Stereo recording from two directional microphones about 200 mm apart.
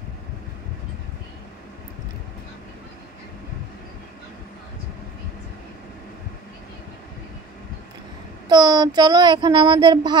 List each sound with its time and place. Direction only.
8.5 s speech: 20° right (ahead or behind)